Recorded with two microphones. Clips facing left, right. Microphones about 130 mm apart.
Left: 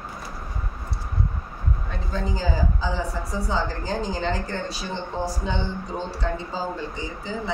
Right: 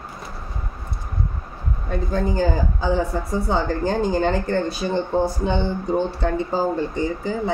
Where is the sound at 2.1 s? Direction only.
55° right (ahead or behind).